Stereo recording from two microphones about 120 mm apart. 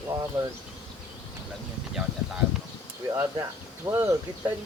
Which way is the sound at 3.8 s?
30° right (ahead or behind).